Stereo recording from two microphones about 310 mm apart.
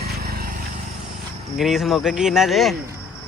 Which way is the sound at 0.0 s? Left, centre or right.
Right.